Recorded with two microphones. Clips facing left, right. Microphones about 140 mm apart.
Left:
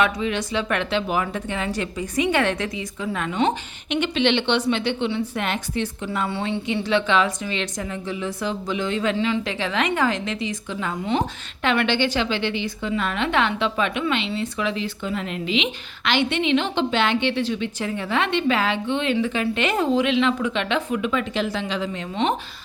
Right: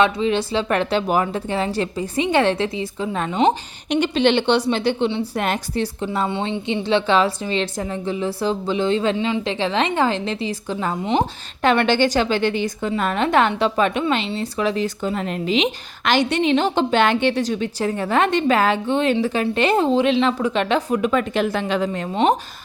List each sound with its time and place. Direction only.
0.0 s speech: 30° right (ahead or behind)
6.2 s speech: 20° right (ahead or behind)
9.1 s speech: 15° right (ahead or behind)
9.5 s a woman's voice: 30° right (ahead or behind)